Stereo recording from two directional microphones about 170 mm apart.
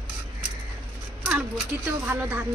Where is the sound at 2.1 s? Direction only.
10° right (ahead or behind).